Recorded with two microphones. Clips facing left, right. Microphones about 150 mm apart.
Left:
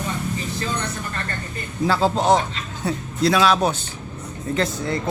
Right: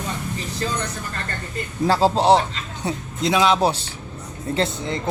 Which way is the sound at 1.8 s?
35° right (ahead or behind).